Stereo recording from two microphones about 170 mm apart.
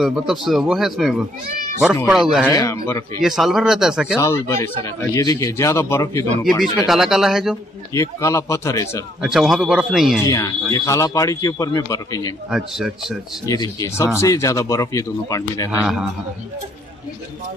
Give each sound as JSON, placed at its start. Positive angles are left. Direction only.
{"t": 0.0, "sound": "a man's voice", "side_deg": 0}
{"t": 2.4, "sound": "speech", "side_deg": 15}
{"t": 3.2, "sound": "a man's voice", "side_deg": 0}
{"t": 4.2, "sound": "speech", "side_deg": 15}
{"t": 6.9, "sound": "a man's voice", "side_deg": 0}
{"t": 7.9, "sound": "speech", "side_deg": 15}
{"t": 9.2, "sound": "a man's voice", "side_deg": 0}
{"t": 10.2, "sound": "speech", "side_deg": 20}
{"t": 12.4, "sound": "a man's voice", "side_deg": -5}
{"t": 13.5, "sound": "speech", "side_deg": 20}
{"t": 15.7, "sound": "a man's voice", "side_deg": -5}